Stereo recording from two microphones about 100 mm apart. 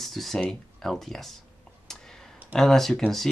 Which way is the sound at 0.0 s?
Centre (ahead or behind).